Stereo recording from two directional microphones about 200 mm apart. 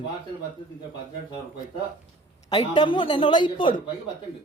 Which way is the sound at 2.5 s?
20° left (ahead or behind).